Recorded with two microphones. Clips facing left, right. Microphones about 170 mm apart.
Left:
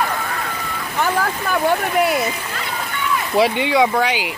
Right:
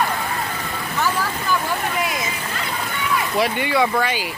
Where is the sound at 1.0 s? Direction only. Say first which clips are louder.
Left 4 dB; 60° left (ahead or behind).